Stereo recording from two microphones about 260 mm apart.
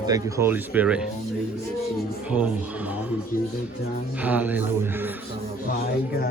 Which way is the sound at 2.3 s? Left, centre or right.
Centre.